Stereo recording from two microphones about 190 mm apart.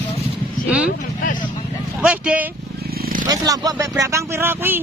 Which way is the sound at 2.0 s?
5° right (ahead or behind).